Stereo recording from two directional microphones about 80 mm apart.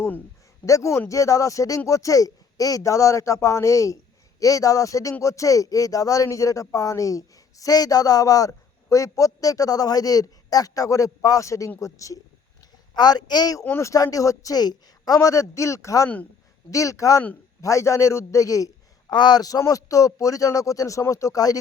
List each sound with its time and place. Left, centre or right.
0.6 s speech: left
12.9 s speech: left
13.7 s a man's voice: left
19.1 s speech: left